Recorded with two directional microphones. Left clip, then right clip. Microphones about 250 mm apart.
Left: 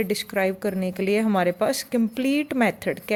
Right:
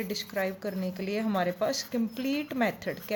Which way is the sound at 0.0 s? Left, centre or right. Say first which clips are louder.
Left 8 dB; left.